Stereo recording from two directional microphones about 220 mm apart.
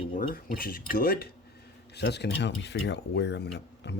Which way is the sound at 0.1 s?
40° left (ahead or behind).